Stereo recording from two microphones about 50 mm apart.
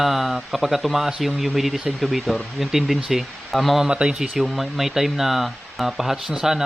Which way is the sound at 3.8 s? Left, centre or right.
Centre.